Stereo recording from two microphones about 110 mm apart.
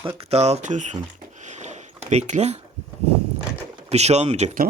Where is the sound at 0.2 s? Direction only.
70° right (ahead or behind); by 0.9 s 90° right.